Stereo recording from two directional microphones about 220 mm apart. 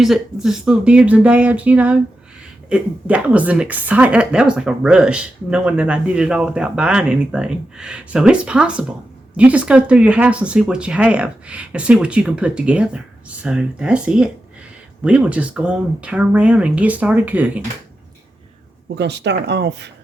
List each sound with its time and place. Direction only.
0.0 s a woman's voice: centre (ahead or behind)
18.9 s speech: 50° right (ahead or behind)